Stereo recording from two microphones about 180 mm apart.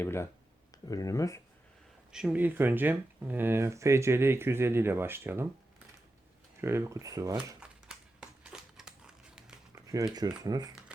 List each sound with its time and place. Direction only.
0.0 s speech: 15° left (ahead or behind)
2.1 s speech: 5° right (ahead or behind)
6.6 s speech: 15° right (ahead or behind)
7.6 s crumpling: 5° right (ahead or behind)
9.7 s speech: 20° right (ahead or behind)